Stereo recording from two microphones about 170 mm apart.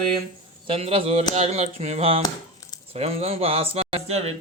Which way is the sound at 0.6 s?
35° right (ahead or behind).